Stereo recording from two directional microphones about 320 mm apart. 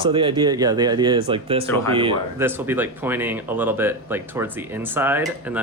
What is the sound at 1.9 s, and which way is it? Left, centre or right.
Speech, centre.